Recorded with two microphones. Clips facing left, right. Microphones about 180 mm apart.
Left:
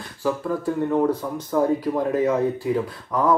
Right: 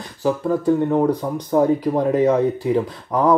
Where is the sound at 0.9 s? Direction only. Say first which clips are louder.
Right 3 dB; 15° right (ahead or behind).